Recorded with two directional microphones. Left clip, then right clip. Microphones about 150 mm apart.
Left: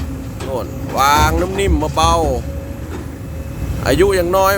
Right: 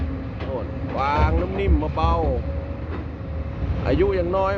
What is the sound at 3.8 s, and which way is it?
Speech, 25° left (ahead or behind).